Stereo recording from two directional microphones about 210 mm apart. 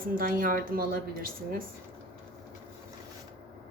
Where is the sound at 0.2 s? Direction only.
40° right (ahead or behind).